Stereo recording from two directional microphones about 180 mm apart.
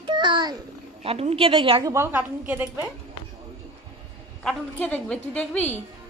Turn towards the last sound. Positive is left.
turn(degrees=10)  # may be behind; listen again after turning